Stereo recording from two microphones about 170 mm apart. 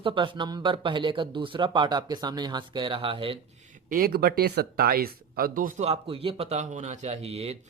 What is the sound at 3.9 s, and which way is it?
Speech, 60° right (ahead or behind).